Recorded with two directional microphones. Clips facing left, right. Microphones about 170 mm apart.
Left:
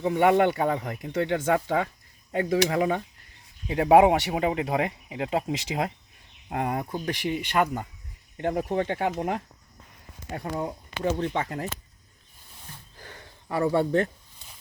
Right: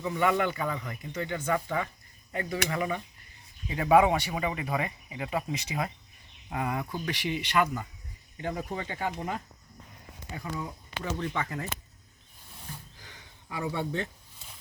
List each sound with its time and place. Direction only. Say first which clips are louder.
0.0 s speech: left 7 dB; 60° left (ahead or behind); by 1.9 s 75° left (ahead or behind)
2.3 s speech: left 8 dB; 90° left
6.5 s speech: left 4 dB; 50° left (ahead or behind)
8.4 s speech: left 8 dB; 60° left (ahead or behind)
10.3 s speech: left 6 dB; 55° left (ahead or behind)
13.0 s a sound: left 6 dB; 55° left (ahead or behind)